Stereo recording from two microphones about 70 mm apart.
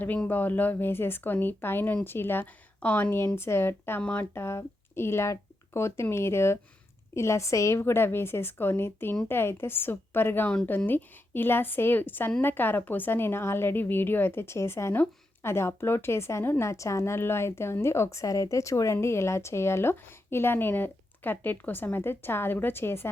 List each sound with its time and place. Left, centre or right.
0.3 s a woman's voice: left
4.0 s speech: left
4.4 s a woman's voice: left